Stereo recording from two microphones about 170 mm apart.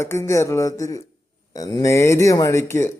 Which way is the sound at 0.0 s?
15° left (ahead or behind).